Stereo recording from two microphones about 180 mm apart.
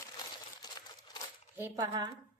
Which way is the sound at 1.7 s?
25° right (ahead or behind).